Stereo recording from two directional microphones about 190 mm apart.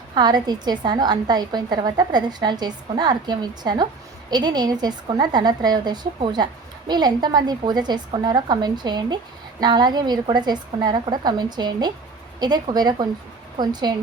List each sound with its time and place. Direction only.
0.1 s a woman's voice: 20° right (ahead or behind)